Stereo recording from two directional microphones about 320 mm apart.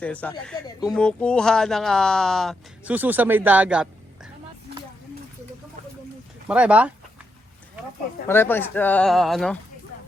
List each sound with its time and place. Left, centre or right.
0.0 s speech: centre
6.5 s speech: centre
8.3 s speech: centre